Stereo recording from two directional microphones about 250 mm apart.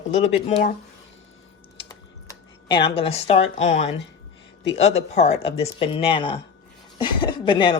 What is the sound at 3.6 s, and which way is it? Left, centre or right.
A woman's voice, left.